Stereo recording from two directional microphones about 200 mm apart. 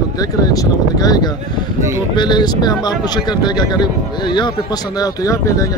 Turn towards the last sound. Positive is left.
turn(degrees=15)  # may be behind; listen again after turning